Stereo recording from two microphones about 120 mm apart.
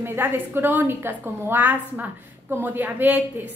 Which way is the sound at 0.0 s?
20° right (ahead or behind).